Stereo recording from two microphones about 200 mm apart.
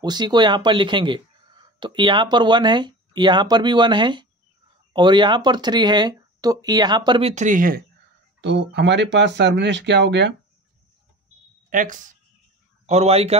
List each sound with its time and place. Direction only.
0.0 s speech: 20° right (ahead or behind); by 7.8 s 45° right (ahead or behind)
8.4 s speech: 60° right (ahead or behind)
11.7 s a man's voice: 40° right (ahead or behind)